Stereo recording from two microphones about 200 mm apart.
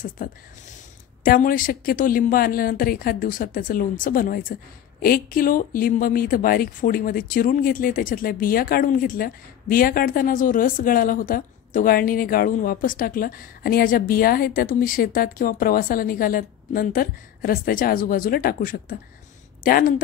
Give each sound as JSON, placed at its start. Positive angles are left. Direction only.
{"t": 0.2, "sound": "speech", "side_deg": 45}